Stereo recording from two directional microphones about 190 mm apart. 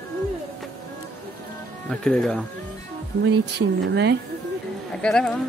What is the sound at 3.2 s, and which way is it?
Speech, 65° right (ahead or behind).